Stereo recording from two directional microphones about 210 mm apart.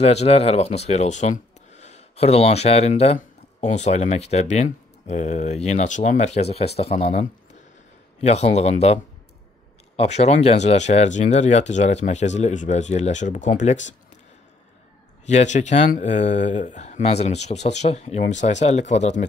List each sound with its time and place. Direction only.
0.0 s speech: 30° left (ahead or behind)
15.2 s speech: 35° left (ahead or behind)